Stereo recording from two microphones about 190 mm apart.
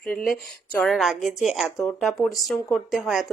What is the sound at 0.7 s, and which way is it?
Speech, centre (ahead or behind).